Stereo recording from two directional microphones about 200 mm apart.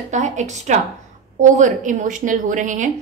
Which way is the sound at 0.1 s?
35° right (ahead or behind).